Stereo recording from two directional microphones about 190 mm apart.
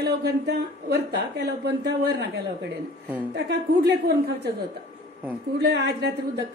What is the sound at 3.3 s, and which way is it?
A woman's voice, 60° right (ahead or behind).